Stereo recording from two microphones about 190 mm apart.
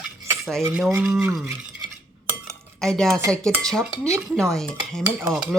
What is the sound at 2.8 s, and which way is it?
Speech, 5° left (ahead or behind).